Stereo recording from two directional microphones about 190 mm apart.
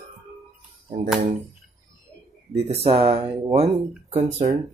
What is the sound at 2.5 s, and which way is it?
Speech, 30° right (ahead or behind).